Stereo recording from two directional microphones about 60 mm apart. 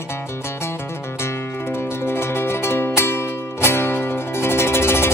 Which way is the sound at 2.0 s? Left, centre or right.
Left.